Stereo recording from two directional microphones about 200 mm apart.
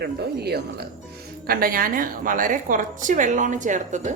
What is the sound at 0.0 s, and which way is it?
A woman's voice, 55° right (ahead or behind).